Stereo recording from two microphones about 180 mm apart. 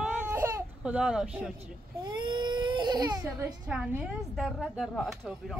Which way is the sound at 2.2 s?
25° right (ahead or behind).